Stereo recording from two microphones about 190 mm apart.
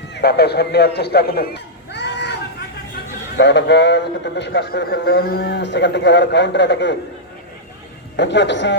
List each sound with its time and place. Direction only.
0.1 s a man's voice: 60° left (ahead or behind)
3.3 s a man's voice: 65° left (ahead or behind)
8.1 s a man's voice: 65° left (ahead or behind)